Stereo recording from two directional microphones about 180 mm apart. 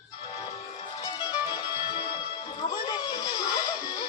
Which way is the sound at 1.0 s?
25° left (ahead or behind).